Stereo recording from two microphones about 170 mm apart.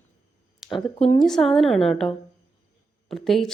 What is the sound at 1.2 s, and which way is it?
A woman's voice, centre (ahead or behind).